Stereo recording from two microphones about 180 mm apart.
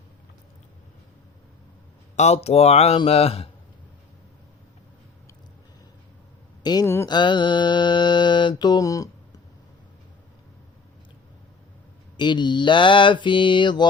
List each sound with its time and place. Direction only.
2.1 s speech: 40° left (ahead or behind)
6.6 s mantra: 20° left (ahead or behind)
12.1 s mantra: 25° left (ahead or behind)